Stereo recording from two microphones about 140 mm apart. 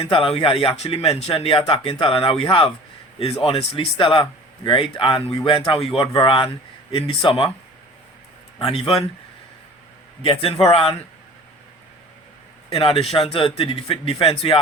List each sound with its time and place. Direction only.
0.1 s speech: 40° left (ahead or behind)
8.5 s speech: 40° left (ahead or behind)
10.7 s a man's voice: 45° left (ahead or behind)
12.7 s speech: 45° left (ahead or behind)